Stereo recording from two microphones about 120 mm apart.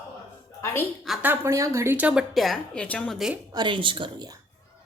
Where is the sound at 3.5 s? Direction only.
40° right (ahead or behind).